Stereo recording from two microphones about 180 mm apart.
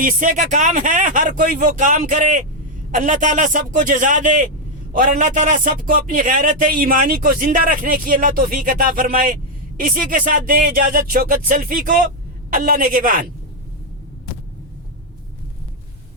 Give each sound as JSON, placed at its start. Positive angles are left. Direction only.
{"t": 0.0, "sound": "a man's voice", "side_deg": -50}